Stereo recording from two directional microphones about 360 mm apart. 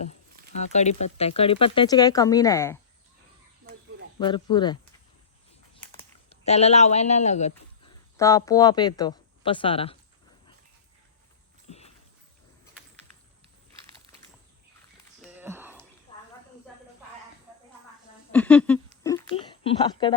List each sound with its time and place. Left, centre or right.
0.6 s speech: centre
4.2 s speech: centre
5.8 s speech: centre
8.1 s speech: centre
15.2 s a sound: centre
16.1 s snake: centre
18.3 s a sound: centre